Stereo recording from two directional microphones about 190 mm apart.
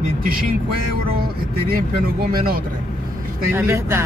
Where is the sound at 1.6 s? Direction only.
50° right (ahead or behind).